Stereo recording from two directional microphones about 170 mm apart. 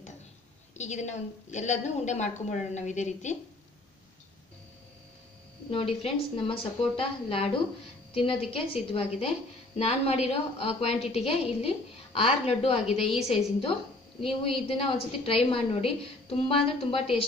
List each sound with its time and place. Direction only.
0.7 s a woman's voice: 45° left (ahead or behind)
5.7 s a woman's voice: 35° left (ahead or behind)